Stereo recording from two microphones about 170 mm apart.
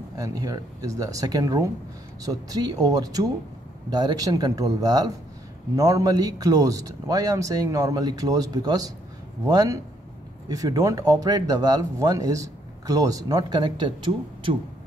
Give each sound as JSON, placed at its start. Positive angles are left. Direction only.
{"t": 0.2, "sound": "speech", "side_deg": -20}